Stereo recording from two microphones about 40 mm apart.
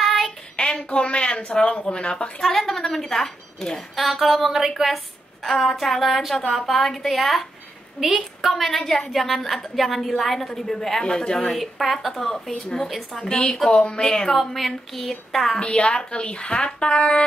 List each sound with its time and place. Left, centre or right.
0.0 s child singing: centre
0.6 s a sound: centre
0.8 s a woman's voice: left
2.4 s a woman's voice: centre
3.9 s a woman's voice: centre
11.5 s a woman's voice: centre
13.3 s a woman's voice: left
14.3 s a woman's voice: centre
15.6 s a woman's voice: left